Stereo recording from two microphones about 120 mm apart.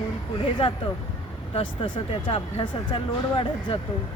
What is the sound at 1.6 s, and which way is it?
Speech, 45° left (ahead or behind).